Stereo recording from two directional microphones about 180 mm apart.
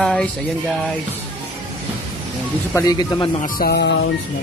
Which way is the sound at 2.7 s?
20° left (ahead or behind).